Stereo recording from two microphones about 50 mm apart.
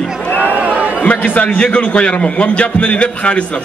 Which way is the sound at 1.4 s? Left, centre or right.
Left.